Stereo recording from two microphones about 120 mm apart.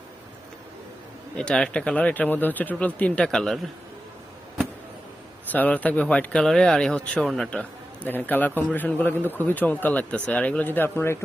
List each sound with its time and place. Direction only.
1.4 s a man's voice: 5° left (ahead or behind)
5.5 s a man's voice: 15° left (ahead or behind)
7.6 s a man's voice: 15° left (ahead or behind)